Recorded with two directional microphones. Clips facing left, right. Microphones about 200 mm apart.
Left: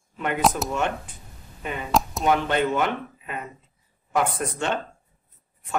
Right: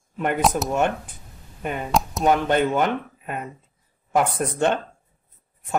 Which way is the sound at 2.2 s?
45° right (ahead or behind).